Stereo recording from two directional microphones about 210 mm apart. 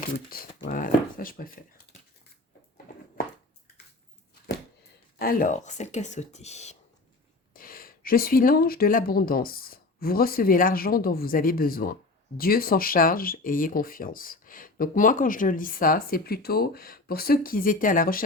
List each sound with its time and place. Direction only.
0.3 s speech: 45° left (ahead or behind)
5.2 s speech: 40° left (ahead or behind)
7.5 s speech: 45° left (ahead or behind)